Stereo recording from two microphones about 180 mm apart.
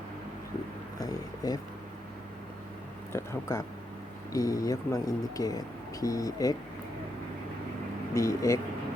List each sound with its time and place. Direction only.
0.9 s a sound: 20° left (ahead or behind)
3.1 s speech: 15° left (ahead or behind)
8.1 s speech: 15° left (ahead or behind)